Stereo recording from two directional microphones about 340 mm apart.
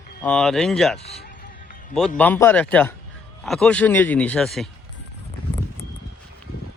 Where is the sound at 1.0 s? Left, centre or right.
Left.